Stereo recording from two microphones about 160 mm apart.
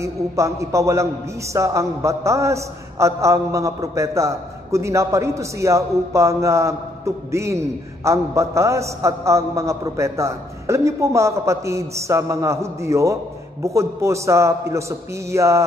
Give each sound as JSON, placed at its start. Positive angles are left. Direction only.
{"t": 0.0, "sound": "a man's voice", "side_deg": -20}